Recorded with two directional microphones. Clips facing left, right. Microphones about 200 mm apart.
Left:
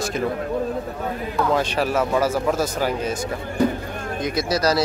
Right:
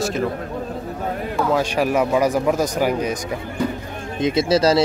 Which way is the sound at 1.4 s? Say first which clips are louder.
Right 1 dB; 10° right (ahead or behind).